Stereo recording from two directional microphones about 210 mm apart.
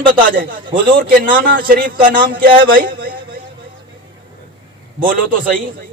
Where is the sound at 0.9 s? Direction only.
40° right (ahead or behind).